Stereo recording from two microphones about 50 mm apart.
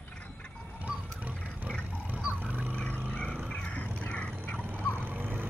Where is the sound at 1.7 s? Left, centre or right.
Right.